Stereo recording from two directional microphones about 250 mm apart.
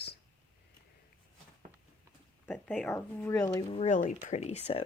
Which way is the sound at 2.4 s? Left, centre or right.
Centre.